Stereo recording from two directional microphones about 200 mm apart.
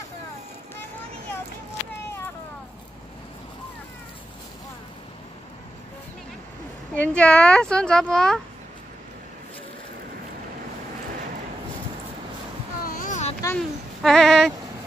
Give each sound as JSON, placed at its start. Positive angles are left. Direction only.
{"t": 6.9, "sound": "a child's voice", "side_deg": 5}
{"t": 12.8, "sound": "a sound", "side_deg": 40}
{"t": 13.6, "sound": "child singing", "side_deg": 0}